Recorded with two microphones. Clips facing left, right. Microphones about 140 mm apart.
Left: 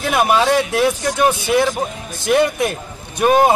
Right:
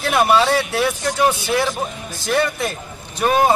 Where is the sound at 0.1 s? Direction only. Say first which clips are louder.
Left 1 dB; 15° left (ahead or behind).